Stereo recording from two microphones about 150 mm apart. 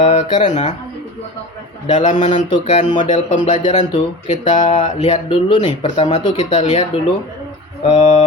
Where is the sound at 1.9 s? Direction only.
50° left (ahead or behind).